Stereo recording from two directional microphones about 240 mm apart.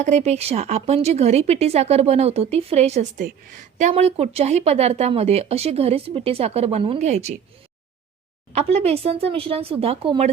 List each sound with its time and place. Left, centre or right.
0.0 s speech: right
8.5 s speech: right